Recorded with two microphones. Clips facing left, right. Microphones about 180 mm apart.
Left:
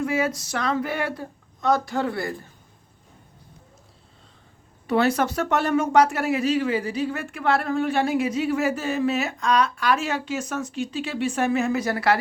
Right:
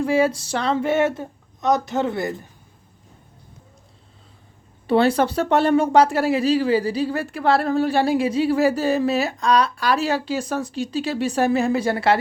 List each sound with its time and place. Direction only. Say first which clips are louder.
0.0 s speech: right 5 dB; 30° right (ahead or behind)
4.9 s speech: right 4 dB; 30° right (ahead or behind)